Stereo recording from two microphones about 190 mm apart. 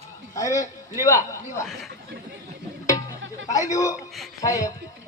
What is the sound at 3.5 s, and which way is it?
A man's voice, 15° left (ahead or behind).